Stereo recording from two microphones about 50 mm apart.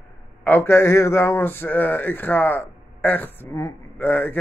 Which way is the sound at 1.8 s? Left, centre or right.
Left.